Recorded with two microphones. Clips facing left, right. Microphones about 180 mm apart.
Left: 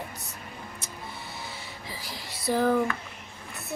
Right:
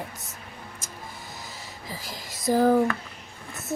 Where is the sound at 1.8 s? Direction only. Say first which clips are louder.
Right 3 dB; 45° right (ahead or behind).